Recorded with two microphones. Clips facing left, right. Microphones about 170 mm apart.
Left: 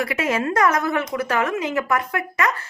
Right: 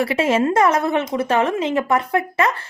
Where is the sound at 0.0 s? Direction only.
30° right (ahead or behind).